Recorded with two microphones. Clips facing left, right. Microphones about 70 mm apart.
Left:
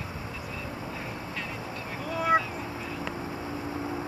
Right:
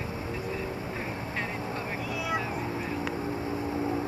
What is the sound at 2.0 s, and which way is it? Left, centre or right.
Vehicle, left.